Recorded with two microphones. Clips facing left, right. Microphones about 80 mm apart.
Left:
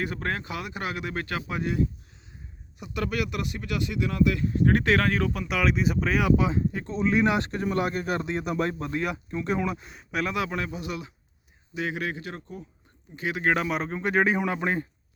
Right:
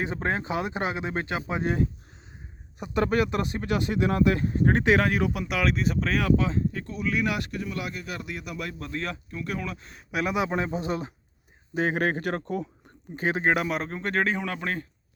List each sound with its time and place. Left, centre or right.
0.0 s speech: right
2.7 s speech: right; by 7.6 s left
7.6 s speech: left
8.2 s speech: left
8.8 s speech: centre
10.1 s speech: centre
10.3 s speech: right
13.1 s speech: right
13.5 s speech: centre